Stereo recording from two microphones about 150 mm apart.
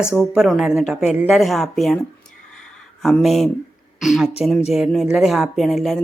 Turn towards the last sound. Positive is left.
turn(degrees=0)  # may be behind; listen again after turning